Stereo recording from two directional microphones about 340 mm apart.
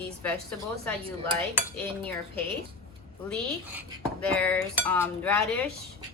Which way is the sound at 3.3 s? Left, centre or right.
Centre.